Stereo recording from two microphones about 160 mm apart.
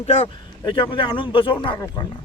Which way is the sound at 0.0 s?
40° left (ahead or behind).